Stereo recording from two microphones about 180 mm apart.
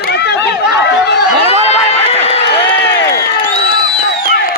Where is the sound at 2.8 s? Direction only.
60° left (ahead or behind).